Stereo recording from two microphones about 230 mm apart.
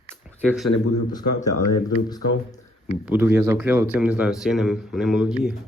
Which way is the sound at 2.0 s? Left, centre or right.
Centre.